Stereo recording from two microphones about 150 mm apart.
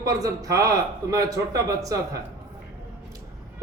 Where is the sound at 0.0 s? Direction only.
25° right (ahead or behind).